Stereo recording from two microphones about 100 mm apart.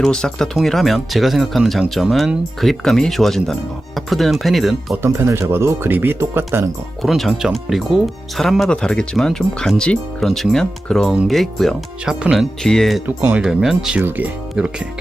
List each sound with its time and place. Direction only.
0.0 s speech: 5° left (ahead or behind)
5.0 s speech: 30° right (ahead or behind)
7.0 s speech: centre (ahead or behind)
13.3 s speech: 5° right (ahead or behind)